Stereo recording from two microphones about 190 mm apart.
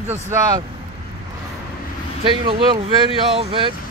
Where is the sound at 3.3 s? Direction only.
30° right (ahead or behind).